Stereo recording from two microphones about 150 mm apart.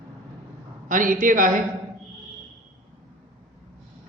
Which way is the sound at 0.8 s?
60° right (ahead or behind).